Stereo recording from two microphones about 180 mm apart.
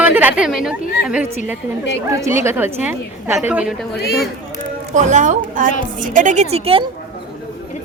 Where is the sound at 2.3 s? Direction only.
15° right (ahead or behind).